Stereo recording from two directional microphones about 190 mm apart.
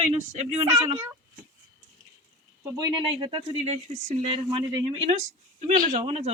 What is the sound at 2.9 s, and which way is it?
Speech, 25° right (ahead or behind).